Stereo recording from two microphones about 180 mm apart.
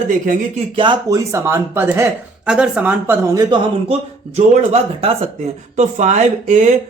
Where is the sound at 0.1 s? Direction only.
45° right (ahead or behind).